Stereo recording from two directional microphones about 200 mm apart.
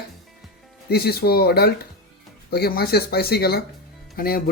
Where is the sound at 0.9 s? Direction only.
50° left (ahead or behind).